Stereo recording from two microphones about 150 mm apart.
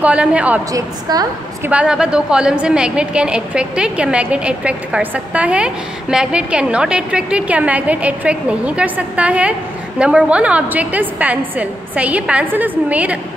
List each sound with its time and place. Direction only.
0.0 s a woman's voice: 10° right (ahead or behind)
0.7 s a woman's voice: 25° right (ahead or behind)
1.7 s a woman's voice: 5° right (ahead or behind)